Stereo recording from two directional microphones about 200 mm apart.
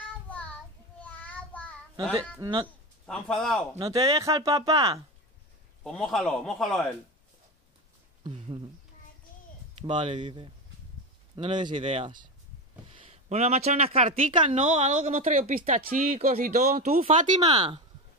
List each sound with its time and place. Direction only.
0.3 s child singing: 5° left (ahead or behind)
2.3 s speech: 20° right (ahead or behind)
3.1 s a man's voice: 5° left (ahead or behind)
3.9 s speech: 15° right (ahead or behind)
5.9 s a man's voice: centre (ahead or behind)
8.3 s a sound: 25° right (ahead or behind)
9.8 s a woman's voice: 25° right (ahead or behind)
17.5 s speech: 25° right (ahead or behind)